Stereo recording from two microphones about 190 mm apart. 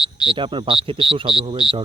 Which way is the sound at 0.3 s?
25° right (ahead or behind).